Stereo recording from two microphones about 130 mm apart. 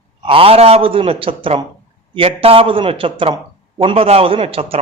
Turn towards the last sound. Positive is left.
turn(degrees=-45)  # may be behind; listen again after turning